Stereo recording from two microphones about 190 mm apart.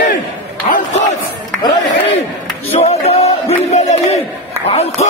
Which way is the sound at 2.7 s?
35° left (ahead or behind).